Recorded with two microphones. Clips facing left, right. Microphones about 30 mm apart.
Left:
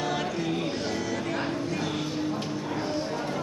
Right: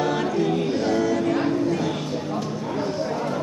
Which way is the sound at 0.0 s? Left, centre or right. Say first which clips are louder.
Right 7 dB; centre.